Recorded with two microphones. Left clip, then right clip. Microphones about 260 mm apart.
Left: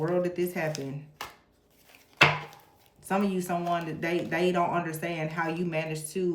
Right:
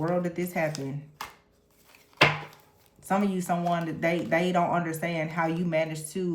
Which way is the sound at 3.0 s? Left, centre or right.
Right.